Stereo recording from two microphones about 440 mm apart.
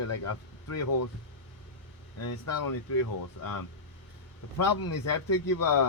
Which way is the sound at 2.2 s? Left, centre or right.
Left.